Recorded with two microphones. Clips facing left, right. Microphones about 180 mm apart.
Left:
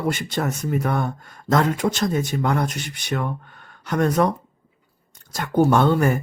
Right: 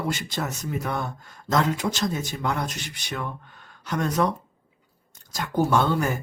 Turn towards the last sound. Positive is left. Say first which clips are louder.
# left 5 dB
turn(degrees=55)  # may be behind; listen again after turning